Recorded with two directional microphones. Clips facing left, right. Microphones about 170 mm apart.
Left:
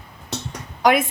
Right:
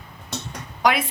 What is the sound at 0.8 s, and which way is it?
Speech, 50° left (ahead or behind).